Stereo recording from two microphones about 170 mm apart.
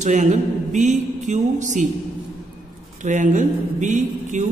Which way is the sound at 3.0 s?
45° right (ahead or behind).